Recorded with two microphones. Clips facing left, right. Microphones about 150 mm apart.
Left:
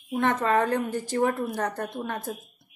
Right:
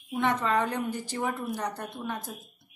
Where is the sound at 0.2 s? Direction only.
50° left (ahead or behind).